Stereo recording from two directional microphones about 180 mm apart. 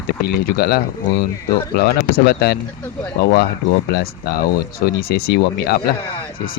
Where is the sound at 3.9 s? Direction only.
60° left (ahead or behind).